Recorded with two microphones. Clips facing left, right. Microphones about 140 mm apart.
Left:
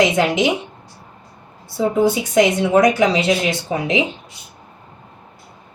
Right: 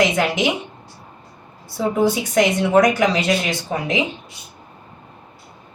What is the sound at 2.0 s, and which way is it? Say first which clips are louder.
Speech: left 2 dB; 20° left (ahead or behind).